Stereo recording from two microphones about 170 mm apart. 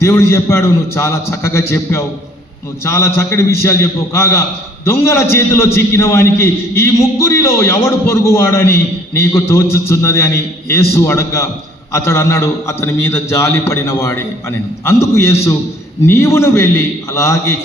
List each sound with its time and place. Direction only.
0.0 s a man's voice: 15° left (ahead or behind)